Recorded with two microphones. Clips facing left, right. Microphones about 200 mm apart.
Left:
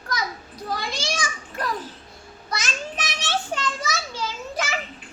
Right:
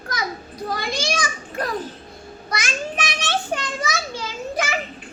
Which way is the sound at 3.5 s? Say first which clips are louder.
Right 2 dB; 15° right (ahead or behind).